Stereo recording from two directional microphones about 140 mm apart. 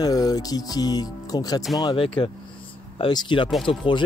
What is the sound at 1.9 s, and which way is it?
Speech, 40° left (ahead or behind).